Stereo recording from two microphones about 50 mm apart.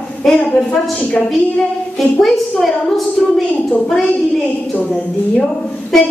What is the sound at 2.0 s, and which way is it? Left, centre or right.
A woman's voice, centre.